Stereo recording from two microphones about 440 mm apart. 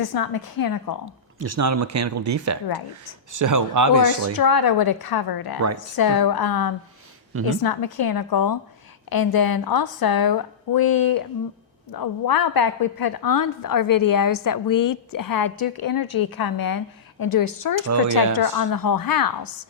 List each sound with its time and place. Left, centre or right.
0.0 s a woman's voice: left
1.4 s speech: right
4.4 s a woman's voice: left